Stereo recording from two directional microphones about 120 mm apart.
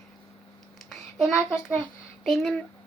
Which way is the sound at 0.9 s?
5° right (ahead or behind).